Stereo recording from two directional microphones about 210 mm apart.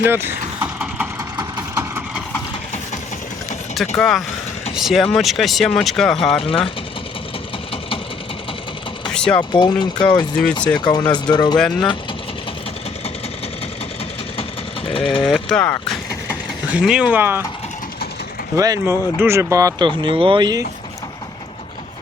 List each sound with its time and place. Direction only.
0.1 s vehicle: 10° right (ahead or behind)
3.8 s speech: centre (ahead or behind)
6.3 s speech: 25° left (ahead or behind)
9.1 s a sound: 5° left (ahead or behind)
9.4 s speech: 20° left (ahead or behind)
11.6 s speech: 5° left (ahead or behind)
14.9 s mechanisms: 25° left (ahead or behind)
15.3 s speech: 5° left (ahead or behind)
18.5 s speech: 15° right (ahead or behind)